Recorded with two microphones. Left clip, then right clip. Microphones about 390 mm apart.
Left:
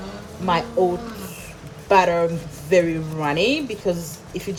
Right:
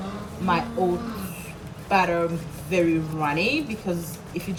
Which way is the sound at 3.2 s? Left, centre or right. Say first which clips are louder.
Left 4 dB; left.